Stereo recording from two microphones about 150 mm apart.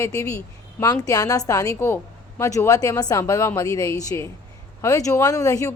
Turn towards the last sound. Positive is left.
turn(degrees=20)  # may be behind; listen again after turning